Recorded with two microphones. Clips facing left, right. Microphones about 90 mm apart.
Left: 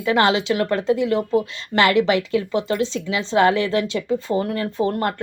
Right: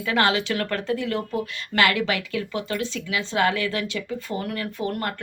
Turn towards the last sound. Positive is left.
turn(degrees=25)  # may be behind; listen again after turning